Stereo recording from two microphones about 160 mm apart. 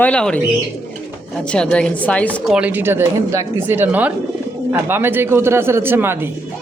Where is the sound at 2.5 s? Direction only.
10° right (ahead or behind).